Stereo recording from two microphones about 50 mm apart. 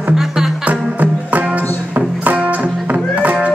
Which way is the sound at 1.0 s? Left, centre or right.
Right.